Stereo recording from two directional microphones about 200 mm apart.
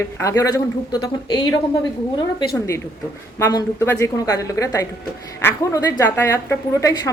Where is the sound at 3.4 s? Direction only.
15° left (ahead or behind).